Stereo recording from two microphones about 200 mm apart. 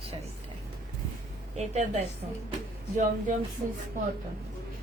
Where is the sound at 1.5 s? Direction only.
35° right (ahead or behind).